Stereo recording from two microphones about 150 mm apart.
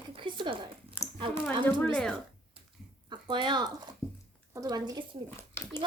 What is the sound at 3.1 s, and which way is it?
A woman's voice, 30° right (ahead or behind).